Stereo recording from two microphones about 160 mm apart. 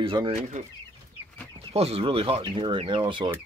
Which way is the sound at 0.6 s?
50° right (ahead or behind).